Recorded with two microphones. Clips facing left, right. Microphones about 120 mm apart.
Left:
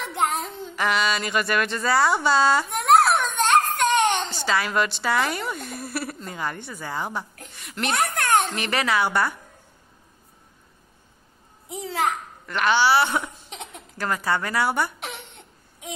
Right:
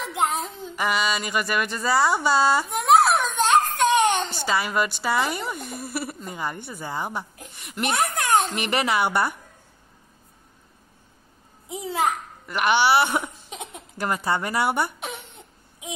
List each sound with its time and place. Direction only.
0.0 s child singing: centre (ahead or behind)
2.2 s a sound: 10° right (ahead or behind)
4.4 s a child's voice: 10° right (ahead or behind)
8.1 s a sound: 5° right (ahead or behind)
8.5 s a child's voice: 15° right (ahead or behind)
11.9 s a child's voice: 10° right (ahead or behind)